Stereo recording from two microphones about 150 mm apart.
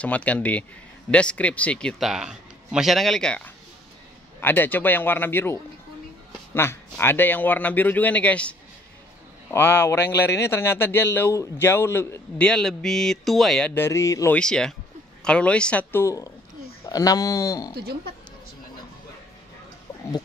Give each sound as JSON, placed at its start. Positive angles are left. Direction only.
{"t": 0.0, "sound": "a man's voice", "side_deg": 10}
{"t": 12.4, "sound": "a man's voice", "side_deg": 5}
{"t": 14.3, "sound": "a man's voice", "side_deg": 5}